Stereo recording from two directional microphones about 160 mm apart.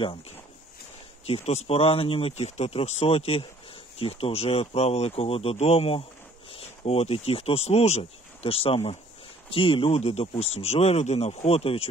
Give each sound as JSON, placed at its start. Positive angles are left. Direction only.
{"t": 1.2, "sound": "speech", "side_deg": 40}